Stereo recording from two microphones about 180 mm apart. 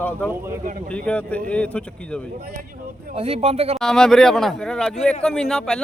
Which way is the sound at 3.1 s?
35° right (ahead or behind).